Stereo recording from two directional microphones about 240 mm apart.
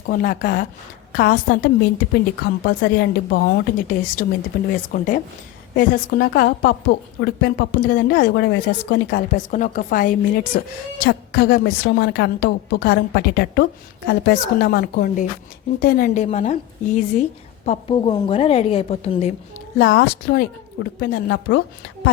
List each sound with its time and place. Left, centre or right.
0.1 s a woman's voice: left
19.8 s a woman's voice: left